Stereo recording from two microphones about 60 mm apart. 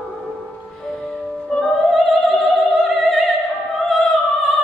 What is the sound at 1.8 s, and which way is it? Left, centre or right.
Opera, centre.